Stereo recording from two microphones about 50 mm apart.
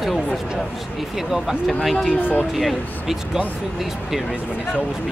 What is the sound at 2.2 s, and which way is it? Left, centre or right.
Speech, left.